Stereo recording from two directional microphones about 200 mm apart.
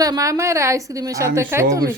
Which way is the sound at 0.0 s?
15° right (ahead or behind).